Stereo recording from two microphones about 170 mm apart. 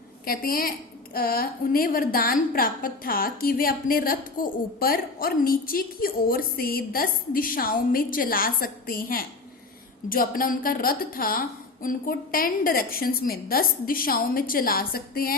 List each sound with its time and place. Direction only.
0.3 s a woman's voice: 60° left (ahead or behind)